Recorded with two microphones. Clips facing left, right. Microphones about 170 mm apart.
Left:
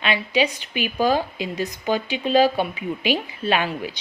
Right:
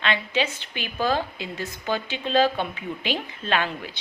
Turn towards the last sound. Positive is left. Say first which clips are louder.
# left 3 dB
turn(degrees=15)  # may be behind; listen again after turning